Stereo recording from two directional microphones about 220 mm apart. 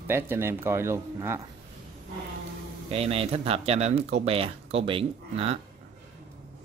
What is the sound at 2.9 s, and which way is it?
Speech, 25° right (ahead or behind).